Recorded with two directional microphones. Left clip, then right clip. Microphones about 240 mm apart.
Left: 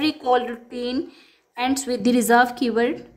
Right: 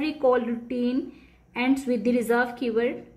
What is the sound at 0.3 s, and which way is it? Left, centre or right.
A woman's voice, left.